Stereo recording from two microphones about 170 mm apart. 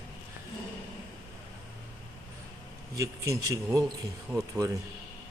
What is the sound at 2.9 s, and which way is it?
Speech, 20° right (ahead or behind).